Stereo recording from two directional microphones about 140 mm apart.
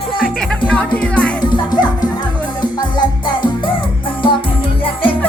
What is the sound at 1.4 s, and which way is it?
Music, 30° left (ahead or behind).